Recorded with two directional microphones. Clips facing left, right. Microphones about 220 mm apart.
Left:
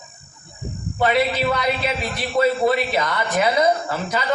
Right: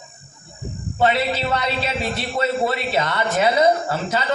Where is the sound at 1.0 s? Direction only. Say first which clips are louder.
Left 1 dB; 25° right (ahead or behind).